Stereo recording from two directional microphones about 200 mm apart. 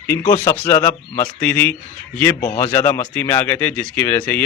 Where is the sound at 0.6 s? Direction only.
20° left (ahead or behind).